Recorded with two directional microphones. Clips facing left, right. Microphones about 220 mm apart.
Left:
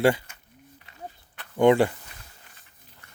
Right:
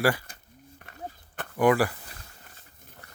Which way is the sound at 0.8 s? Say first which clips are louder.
Right 2 dB; 50° right (ahead or behind).